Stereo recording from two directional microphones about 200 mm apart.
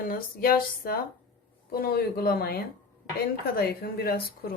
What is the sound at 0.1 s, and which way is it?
A woman's voice, 50° left (ahead or behind).